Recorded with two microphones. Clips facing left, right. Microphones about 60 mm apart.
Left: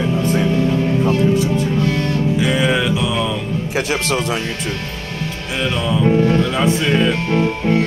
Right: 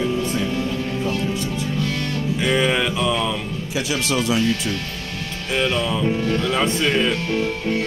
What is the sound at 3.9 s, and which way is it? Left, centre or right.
Speech, left.